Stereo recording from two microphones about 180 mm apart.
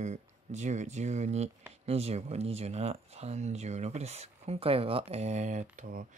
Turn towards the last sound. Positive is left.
turn(degrees=-45)  # may be behind; listen again after turning